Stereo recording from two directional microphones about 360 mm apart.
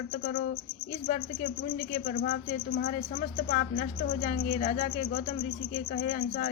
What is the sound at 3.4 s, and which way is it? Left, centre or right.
Speech, left.